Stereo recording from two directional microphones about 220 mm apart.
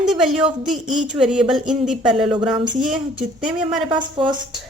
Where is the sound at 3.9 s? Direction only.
20° right (ahead or behind).